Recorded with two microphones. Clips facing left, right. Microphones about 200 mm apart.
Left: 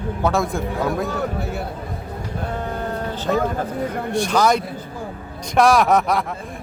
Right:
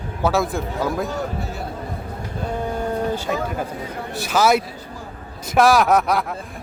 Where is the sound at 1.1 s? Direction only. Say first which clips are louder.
Left 2 dB; 60° left (ahead or behind).